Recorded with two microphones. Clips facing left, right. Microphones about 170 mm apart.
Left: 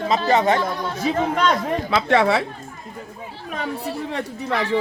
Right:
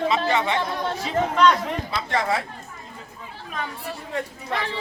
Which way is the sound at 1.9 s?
75° left (ahead or behind).